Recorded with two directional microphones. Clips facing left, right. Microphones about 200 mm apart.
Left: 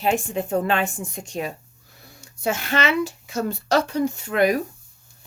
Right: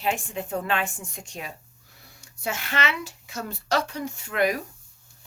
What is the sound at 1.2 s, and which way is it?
Speech, 30° left (ahead or behind).